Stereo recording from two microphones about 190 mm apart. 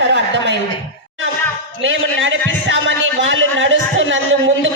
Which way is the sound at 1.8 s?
85° right.